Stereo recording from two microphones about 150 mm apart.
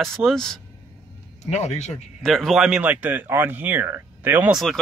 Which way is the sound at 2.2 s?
Centre (ahead or behind).